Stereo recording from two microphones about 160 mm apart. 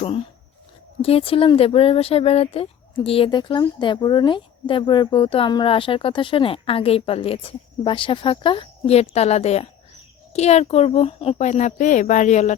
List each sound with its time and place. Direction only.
1.0 s speech: 35° left (ahead or behind)